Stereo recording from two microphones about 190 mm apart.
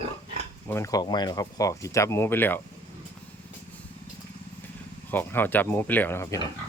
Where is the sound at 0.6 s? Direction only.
15° left (ahead or behind).